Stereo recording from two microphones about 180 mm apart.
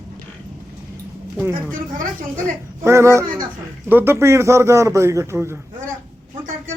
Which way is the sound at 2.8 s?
15° right (ahead or behind).